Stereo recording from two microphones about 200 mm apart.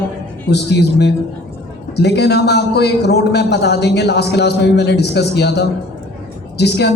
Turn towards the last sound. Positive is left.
turn(degrees=55)  # may be behind; listen again after turning